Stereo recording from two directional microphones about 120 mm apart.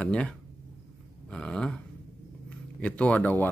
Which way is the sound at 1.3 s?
5° left (ahead or behind).